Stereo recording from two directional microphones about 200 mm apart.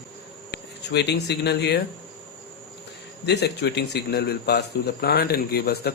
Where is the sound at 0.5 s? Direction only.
60° left (ahead or behind).